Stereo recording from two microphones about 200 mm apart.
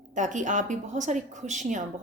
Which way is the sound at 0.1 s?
40° right (ahead or behind).